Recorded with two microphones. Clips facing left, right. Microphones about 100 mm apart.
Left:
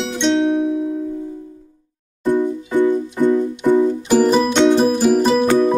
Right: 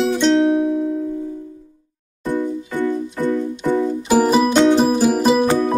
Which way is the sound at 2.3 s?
20° left (ahead or behind).